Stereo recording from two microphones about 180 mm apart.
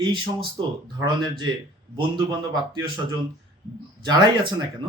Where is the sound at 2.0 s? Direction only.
25° right (ahead or behind).